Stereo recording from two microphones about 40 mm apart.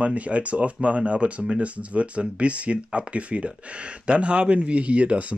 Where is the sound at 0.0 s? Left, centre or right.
Right.